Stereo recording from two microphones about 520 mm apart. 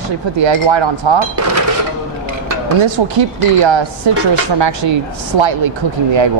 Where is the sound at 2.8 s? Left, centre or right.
Right.